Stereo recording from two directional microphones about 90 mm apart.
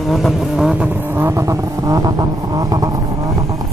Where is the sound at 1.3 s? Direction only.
35° right (ahead or behind).